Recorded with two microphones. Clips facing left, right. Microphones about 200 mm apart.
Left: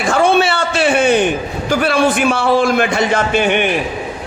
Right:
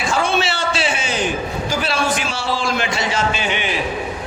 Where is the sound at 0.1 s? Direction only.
60° left (ahead or behind).